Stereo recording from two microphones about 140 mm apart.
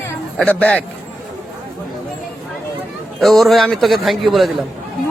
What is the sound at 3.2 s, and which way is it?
Speech, centre (ahead or behind).